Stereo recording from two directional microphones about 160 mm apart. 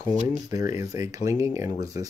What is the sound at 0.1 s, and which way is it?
Speech, 50° right (ahead or behind).